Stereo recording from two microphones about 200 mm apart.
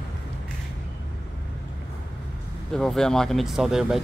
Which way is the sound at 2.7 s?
5° left (ahead or behind).